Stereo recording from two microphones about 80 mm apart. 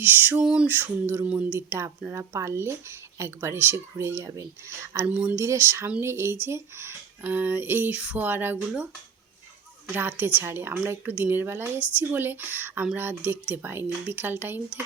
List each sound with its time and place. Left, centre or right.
0.3 s a sound: centre
0.7 s speech: right
5.0 s speech: right
9.9 s speech: right